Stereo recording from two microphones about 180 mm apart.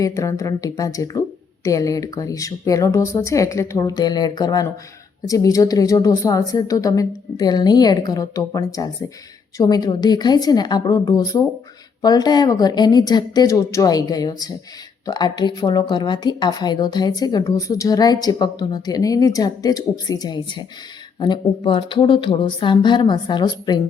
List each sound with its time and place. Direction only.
0.0 s speech: 15° left (ahead or behind)